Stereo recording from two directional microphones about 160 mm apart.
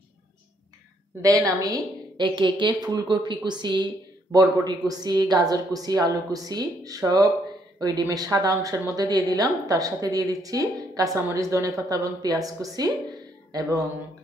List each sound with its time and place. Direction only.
1.6 s a woman's voice: 25° right (ahead or behind)